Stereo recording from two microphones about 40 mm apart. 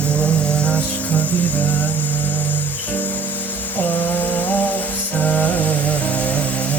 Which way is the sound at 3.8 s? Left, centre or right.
Left.